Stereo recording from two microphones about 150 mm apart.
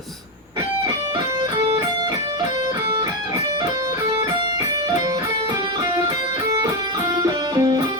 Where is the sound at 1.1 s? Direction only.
30° right (ahead or behind).